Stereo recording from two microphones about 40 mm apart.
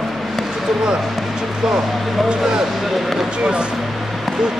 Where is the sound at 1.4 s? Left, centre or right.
Centre.